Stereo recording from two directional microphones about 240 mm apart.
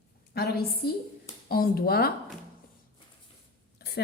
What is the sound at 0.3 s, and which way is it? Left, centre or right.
A woman's voice, left.